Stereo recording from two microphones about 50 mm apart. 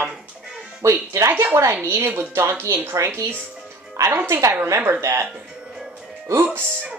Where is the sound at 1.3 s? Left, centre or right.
Right.